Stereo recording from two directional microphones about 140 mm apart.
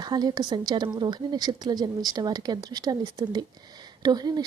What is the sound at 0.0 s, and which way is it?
Speech, 30° right (ahead or behind).